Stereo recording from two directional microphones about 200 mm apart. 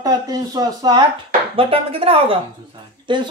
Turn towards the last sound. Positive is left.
turn(degrees=-25)  # may be behind; listen again after turning